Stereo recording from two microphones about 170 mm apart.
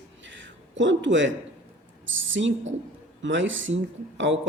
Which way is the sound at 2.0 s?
90° right.